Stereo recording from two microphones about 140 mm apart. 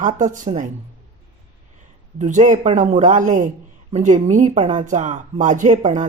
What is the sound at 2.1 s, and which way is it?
Speech, 60° right (ahead or behind).